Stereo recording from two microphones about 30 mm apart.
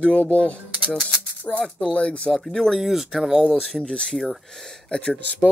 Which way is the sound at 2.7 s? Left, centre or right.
Centre.